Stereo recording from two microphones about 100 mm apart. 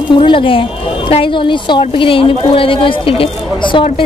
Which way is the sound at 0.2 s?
60° left (ahead or behind).